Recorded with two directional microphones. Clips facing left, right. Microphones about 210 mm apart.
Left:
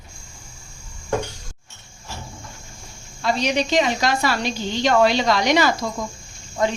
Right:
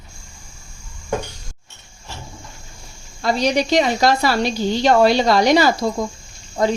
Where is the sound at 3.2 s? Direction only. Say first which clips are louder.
Right 3 dB; 35° right (ahead or behind).